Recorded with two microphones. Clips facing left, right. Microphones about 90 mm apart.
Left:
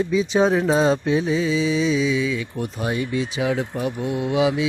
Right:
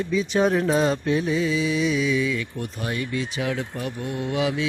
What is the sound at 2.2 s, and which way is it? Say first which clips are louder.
Mantra: left 2 dB; 15° left (ahead or behind).